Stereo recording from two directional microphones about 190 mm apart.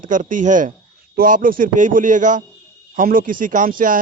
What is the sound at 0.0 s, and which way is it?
A man's voice, 45° right (ahead or behind).